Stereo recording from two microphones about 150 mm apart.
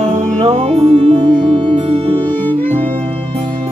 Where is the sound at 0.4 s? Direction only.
40° right (ahead or behind).